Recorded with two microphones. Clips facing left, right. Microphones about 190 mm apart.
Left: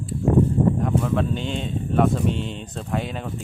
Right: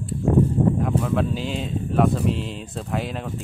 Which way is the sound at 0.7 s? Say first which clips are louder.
Even; centre (ahead or behind).